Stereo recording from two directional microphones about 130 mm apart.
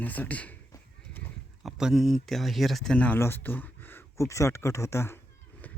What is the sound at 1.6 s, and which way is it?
Speech, centre (ahead or behind).